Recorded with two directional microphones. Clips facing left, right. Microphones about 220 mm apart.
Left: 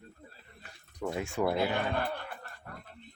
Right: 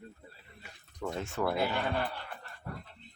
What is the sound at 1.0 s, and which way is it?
Speech, 10° left (ahead or behind).